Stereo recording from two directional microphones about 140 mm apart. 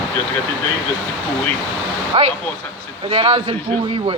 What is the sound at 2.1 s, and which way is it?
A man's voice, 40° right (ahead or behind).